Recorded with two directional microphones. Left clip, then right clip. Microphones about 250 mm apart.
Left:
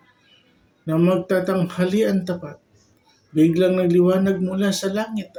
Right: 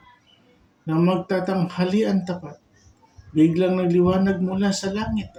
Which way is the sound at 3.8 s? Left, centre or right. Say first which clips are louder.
Left 2 dB; right.